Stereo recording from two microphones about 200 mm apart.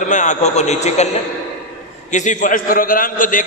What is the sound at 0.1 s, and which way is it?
Speech, 40° left (ahead or behind).